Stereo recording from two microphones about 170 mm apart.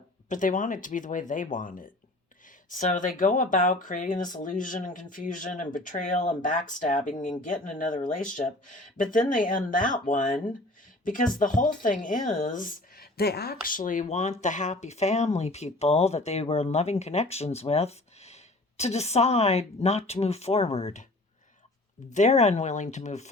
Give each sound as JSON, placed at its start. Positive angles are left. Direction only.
{"t": 0.3, "sound": "speech", "side_deg": 50}
{"t": 13.7, "sound": "speech", "side_deg": 50}
{"t": 22.1, "sound": "speech", "side_deg": 40}